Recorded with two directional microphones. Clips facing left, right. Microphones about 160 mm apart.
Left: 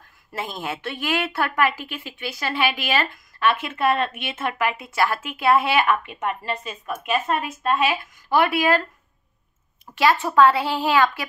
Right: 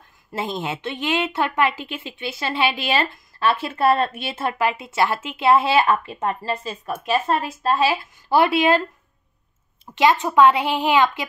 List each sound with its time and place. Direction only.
0.3 s a woman's voice: 25° right (ahead or behind)
9.9 s a woman's voice: 20° right (ahead or behind)